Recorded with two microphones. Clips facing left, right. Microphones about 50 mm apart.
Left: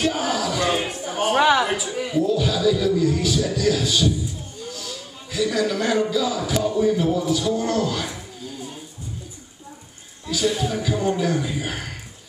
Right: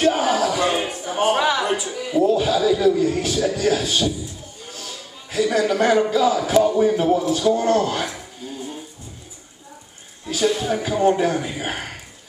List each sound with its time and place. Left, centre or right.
0.0 s a sound: right
1.3 s a woman's voice: left
1.6 s a woman's voice: centre
2.1 s a man's voice: right
4.6 s a sound: right
5.5 s a man's voice: right
10.2 s a man's voice: right